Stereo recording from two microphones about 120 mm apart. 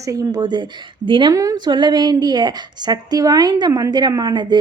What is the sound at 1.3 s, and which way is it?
A woman's voice, 30° right (ahead or behind).